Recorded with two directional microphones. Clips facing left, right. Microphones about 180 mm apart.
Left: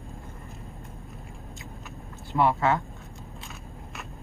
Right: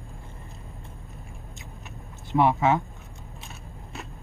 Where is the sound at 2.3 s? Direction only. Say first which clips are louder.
Right 2 dB; 20° right (ahead or behind).